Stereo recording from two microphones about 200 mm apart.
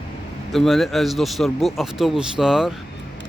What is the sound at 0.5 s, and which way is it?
Speech, centre (ahead or behind).